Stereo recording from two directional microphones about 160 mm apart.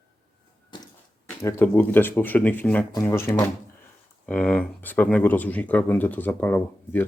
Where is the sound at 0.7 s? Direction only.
30° left (ahead or behind).